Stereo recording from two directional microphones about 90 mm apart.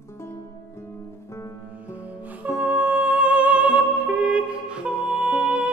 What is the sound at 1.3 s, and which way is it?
Music, 35° left (ahead or behind).